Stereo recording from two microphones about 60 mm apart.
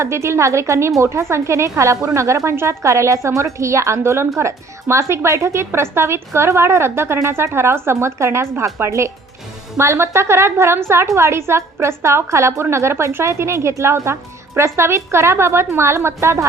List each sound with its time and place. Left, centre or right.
0.0 s speech: right